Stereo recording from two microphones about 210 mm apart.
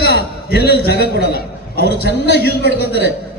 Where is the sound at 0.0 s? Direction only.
50° left (ahead or behind).